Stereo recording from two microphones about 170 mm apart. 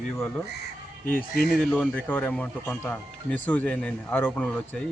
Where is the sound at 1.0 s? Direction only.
10° left (ahead or behind).